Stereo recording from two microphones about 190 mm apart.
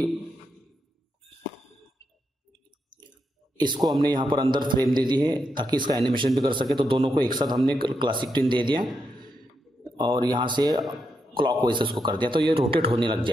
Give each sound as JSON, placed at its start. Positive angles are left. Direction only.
{"t": 3.5, "sound": "a man's voice", "side_deg": -25}
{"t": 9.9, "sound": "speech", "side_deg": -25}